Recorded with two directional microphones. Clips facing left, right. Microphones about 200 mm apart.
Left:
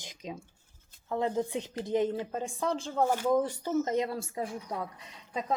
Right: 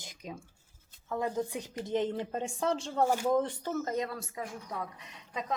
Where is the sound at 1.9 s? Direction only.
10° left (ahead or behind).